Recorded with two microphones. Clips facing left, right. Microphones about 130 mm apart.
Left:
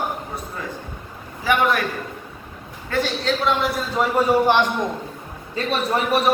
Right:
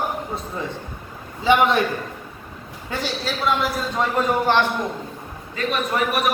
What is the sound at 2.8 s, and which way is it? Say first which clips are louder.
A man's voice: left 4 dB; 15° right (ahead or behind).